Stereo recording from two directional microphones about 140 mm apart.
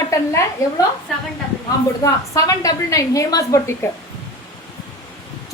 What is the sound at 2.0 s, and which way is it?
A woman's voice, 25° left (ahead or behind).